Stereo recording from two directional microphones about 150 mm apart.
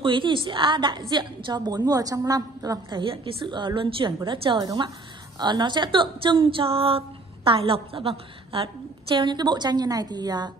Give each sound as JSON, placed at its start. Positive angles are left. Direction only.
{"t": 0.0, "sound": "a woman's voice", "side_deg": -35}